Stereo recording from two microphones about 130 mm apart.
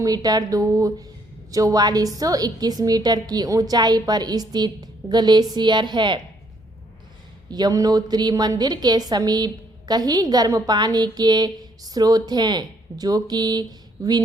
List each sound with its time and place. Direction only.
0.0 s a woman's voice: 30° right (ahead or behind)
7.5 s a woman's voice: 30° right (ahead or behind)